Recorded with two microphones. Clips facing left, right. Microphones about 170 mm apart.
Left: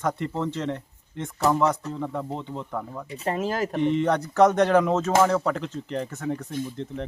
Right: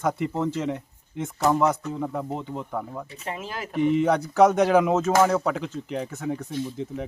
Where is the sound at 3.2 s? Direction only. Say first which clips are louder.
Left 10 dB; 40° left (ahead or behind).